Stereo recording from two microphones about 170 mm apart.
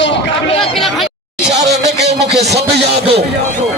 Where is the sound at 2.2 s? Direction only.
85° right.